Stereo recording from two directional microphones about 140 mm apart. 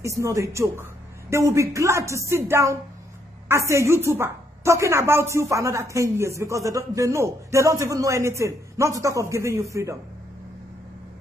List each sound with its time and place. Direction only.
0.0 s a woman's voice: 20° right (ahead or behind)